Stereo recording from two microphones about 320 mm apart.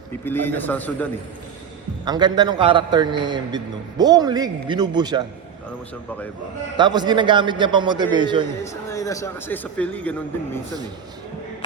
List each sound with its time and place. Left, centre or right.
0.3 s a man's voice: centre
2.0 s a man's voice: centre
6.7 s a man's voice: centre
8.6 s a man's voice: centre